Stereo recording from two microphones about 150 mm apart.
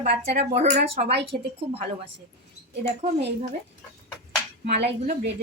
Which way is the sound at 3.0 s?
45° right (ahead or behind).